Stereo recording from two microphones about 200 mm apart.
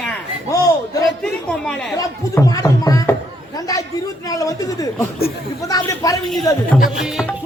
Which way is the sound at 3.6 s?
15° left (ahead or behind).